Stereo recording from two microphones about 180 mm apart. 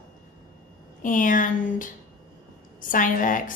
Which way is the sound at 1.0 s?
45° left (ahead or behind).